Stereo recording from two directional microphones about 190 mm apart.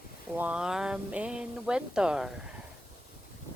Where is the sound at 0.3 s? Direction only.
5° right (ahead or behind).